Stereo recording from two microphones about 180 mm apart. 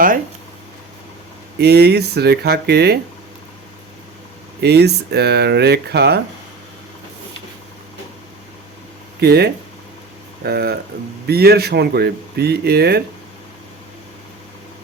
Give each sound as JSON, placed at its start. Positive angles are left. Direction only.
{"t": 1.5, "sound": "speech", "side_deg": -65}
{"t": 4.6, "sound": "speech", "side_deg": -65}
{"t": 9.2, "sound": "speech", "side_deg": -65}